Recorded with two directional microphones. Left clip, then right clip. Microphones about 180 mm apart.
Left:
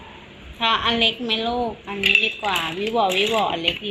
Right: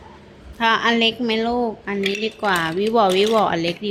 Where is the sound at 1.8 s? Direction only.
35° right (ahead or behind).